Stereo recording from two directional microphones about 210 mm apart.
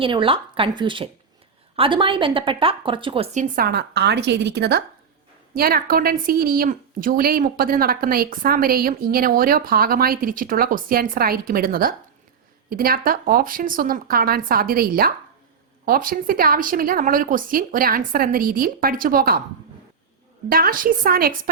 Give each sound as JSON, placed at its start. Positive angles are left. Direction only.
{"t": 0.0, "sound": "a woman's voice", "side_deg": -25}
{"t": 3.5, "sound": "a woman's voice", "side_deg": -45}
{"t": 20.5, "sound": "a woman's voice", "side_deg": -45}